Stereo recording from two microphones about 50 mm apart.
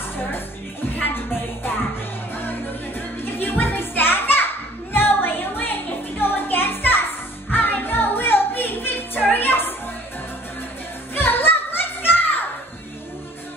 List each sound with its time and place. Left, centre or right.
0.9 s music: left
2.3 s music: left
11.1 s music: left